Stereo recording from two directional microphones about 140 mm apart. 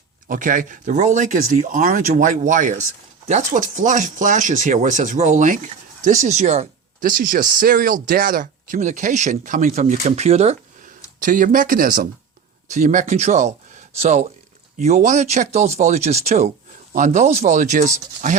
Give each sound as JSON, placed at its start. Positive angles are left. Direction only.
{"t": 0.3, "sound": "speech", "side_deg": -70}
{"t": 7.0, "sound": "speech", "side_deg": -80}
{"t": 10.8, "sound": "speech", "side_deg": -75}
{"t": 12.7, "sound": "speech", "side_deg": -60}